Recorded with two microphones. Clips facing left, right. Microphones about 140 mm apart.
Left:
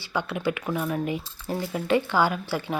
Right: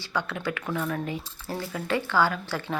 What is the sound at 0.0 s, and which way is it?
Speech, 15° left (ahead or behind).